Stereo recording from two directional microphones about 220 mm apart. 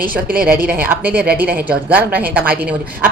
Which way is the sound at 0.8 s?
10° right (ahead or behind).